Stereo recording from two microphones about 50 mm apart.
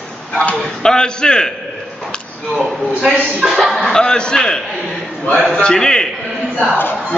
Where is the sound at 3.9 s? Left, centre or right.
Centre.